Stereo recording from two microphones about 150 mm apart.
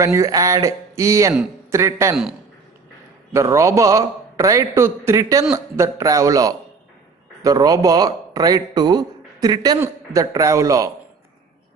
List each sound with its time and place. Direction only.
0.0 s a man's voice: 20° right (ahead or behind)
3.3 s a man's voice: 20° right (ahead or behind)